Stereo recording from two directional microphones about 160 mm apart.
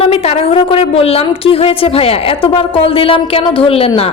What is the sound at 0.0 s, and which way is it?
A woman's voice, 35° left (ahead or behind).